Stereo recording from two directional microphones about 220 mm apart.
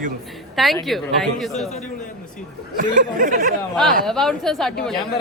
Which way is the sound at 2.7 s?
40° right (ahead or behind).